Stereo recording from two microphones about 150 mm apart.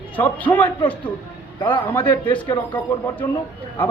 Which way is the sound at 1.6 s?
35° left (ahead or behind).